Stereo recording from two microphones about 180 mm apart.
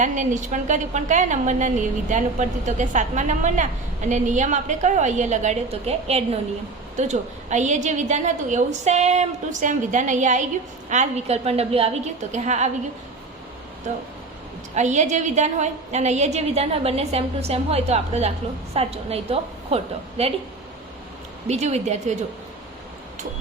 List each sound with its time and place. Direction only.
0.0 s a woman's voice: 45° right (ahead or behind)
14.8 s a woman's voice: 40° right (ahead or behind)
21.4 s a woman's voice: 40° right (ahead or behind)